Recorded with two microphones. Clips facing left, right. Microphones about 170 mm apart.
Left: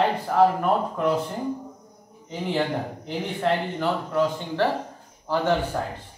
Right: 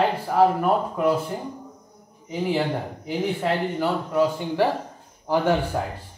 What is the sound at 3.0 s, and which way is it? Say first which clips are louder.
Speech: right 1 dB; 5° right (ahead or behind).